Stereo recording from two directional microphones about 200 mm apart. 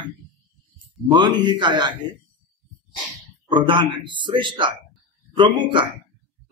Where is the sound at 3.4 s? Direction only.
25° right (ahead or behind).